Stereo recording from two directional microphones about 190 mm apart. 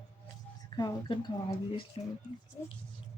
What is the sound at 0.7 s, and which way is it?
Speech, 25° left (ahead or behind).